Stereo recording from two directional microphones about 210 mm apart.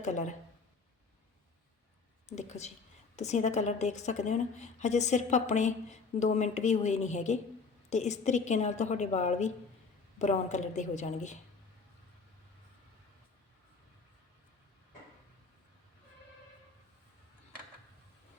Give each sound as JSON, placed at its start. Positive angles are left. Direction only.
{"t": 0.0, "sound": "a woman's voice", "side_deg": 35}
{"t": 2.3, "sound": "a woman's voice", "side_deg": 35}